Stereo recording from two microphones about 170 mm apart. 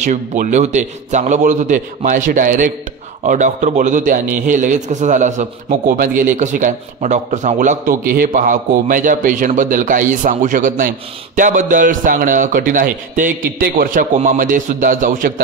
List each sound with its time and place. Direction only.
0.0 s a man's voice: 45° right (ahead or behind)